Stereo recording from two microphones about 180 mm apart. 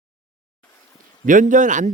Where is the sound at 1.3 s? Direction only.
45° right (ahead or behind).